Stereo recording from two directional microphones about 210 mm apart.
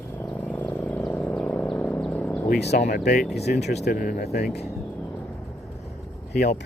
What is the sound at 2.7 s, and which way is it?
Speech, 40° left (ahead or behind).